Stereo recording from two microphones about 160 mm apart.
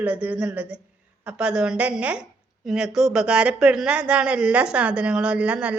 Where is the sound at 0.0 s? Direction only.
10° right (ahead or behind).